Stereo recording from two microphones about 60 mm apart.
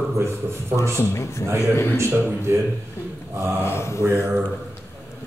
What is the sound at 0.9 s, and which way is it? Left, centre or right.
Speech, left.